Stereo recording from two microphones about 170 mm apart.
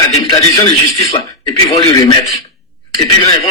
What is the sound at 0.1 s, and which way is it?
A man's voice, 20° left (ahead or behind).